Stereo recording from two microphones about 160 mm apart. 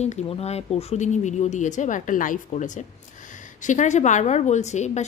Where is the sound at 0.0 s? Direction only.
45° left (ahead or behind).